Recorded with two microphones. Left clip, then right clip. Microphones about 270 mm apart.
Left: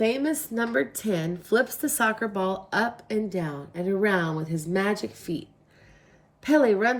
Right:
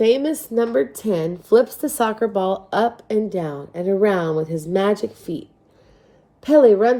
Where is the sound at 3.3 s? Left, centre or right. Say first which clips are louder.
Right 6 dB; right.